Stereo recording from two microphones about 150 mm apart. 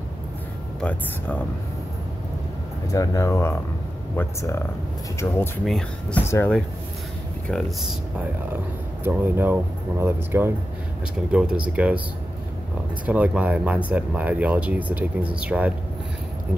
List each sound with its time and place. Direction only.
0.7 s speech: 10° left (ahead or behind)
2.9 s speech: 20° left (ahead or behind)
5.7 s speech: 5° left (ahead or behind)
6.2 s speech: 15° left (ahead or behind)
9.0 s speech: 15° right (ahead or behind)
13.0 s speech: 10° right (ahead or behind)